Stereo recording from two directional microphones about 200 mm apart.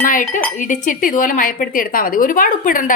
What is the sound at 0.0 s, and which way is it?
Cutlery, 40° left (ahead or behind).